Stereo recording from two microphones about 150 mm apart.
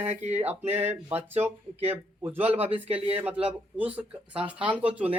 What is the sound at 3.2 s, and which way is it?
Speech, 10° right (ahead or behind).